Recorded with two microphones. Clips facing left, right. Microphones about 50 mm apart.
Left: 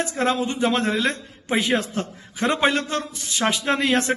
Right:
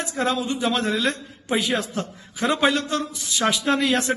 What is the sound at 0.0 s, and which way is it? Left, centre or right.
A man's voice, left.